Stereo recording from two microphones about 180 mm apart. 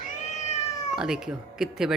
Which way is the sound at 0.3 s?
40° left (ahead or behind).